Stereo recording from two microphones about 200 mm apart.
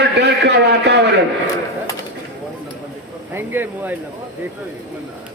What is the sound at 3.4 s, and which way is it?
Speech, 10° right (ahead or behind).